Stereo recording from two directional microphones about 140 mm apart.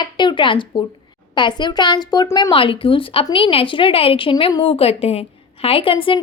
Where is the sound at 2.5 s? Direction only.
40° left (ahead or behind).